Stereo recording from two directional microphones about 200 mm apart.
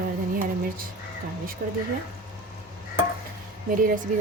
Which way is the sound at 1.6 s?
60° right (ahead or behind).